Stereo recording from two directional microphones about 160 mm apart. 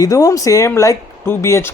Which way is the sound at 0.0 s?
20° left (ahead or behind).